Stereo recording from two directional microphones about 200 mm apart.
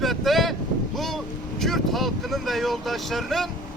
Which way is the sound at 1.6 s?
Centre (ahead or behind).